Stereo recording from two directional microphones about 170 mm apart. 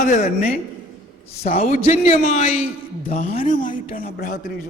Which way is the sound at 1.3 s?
40° left (ahead or behind).